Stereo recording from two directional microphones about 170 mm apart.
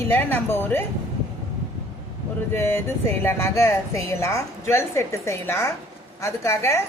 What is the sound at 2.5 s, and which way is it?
A woman's voice, 15° left (ahead or behind).